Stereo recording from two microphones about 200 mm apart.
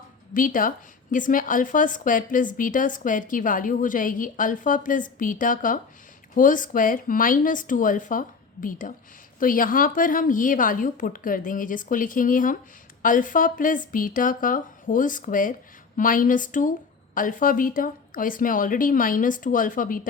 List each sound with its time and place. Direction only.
0.3 s a woman's voice: 45° left (ahead or behind)